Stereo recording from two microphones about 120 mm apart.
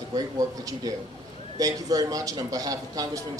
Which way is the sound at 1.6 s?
30° right (ahead or behind).